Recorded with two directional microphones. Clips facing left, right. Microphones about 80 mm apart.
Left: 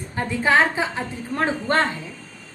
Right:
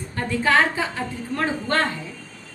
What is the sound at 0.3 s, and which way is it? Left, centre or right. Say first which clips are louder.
A woman's voice: left 1 dB; centre.